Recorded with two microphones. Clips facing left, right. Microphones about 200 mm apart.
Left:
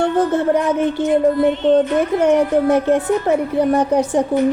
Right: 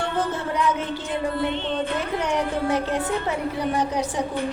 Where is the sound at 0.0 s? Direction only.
55° left (ahead or behind).